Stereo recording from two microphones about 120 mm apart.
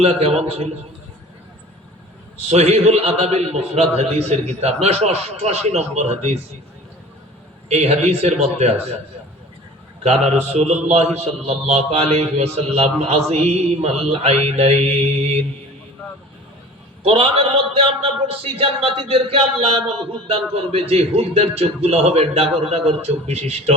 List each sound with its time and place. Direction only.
0.0 s a man's voice: 55° right (ahead or behind)
2.5 s a man's voice: 60° right (ahead or behind)
7.7 s a man's voice: 65° right (ahead or behind)
10.0 s a man's voice: 65° right (ahead or behind)
17.0 s a man's voice: 50° right (ahead or behind)